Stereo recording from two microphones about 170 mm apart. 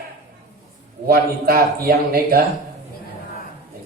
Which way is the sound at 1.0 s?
60° right (ahead or behind).